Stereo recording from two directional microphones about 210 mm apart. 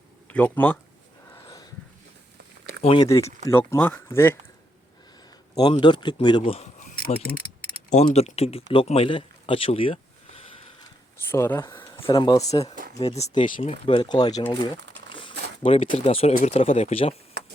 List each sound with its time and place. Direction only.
0.3 s speech: 5° left (ahead or behind)
1.3 s dog: 15° left (ahead or behind)
2.8 s speech: 20° left (ahead or behind)
5.5 s speech: 20° left (ahead or behind)
8.7 s a sound: 25° left (ahead or behind)
11.3 s speech: 10° left (ahead or behind)
13.0 s speech: 30° left (ahead or behind)